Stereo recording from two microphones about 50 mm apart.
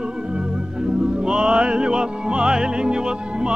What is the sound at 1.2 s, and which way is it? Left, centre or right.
Music, centre.